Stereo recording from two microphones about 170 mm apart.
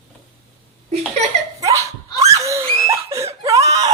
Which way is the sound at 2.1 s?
20° right (ahead or behind).